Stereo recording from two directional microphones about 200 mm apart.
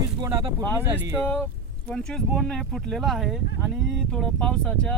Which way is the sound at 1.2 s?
5° left (ahead or behind).